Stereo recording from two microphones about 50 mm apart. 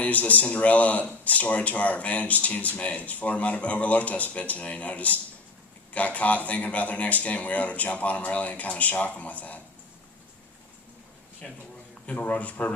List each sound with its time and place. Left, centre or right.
0.0 s a man's voice: left
11.4 s speech: left